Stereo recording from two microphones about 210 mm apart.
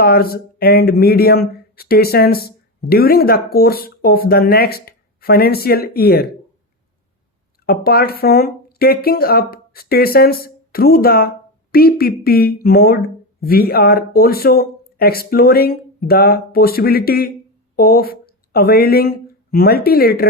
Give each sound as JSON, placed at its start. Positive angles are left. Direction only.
{"t": 0.0, "sound": "speech", "side_deg": 45}
{"t": 7.6, "sound": "speech", "side_deg": 45}